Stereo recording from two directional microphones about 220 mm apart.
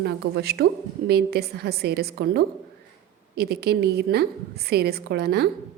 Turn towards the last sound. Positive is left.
turn(degrees=-45)  # may be behind; listen again after turning